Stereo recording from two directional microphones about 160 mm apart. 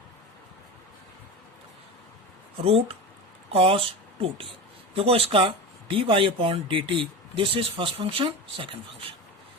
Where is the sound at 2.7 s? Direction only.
35° right (ahead or behind).